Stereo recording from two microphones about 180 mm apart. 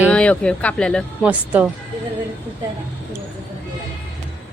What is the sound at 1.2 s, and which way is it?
Speech, 5° right (ahead or behind).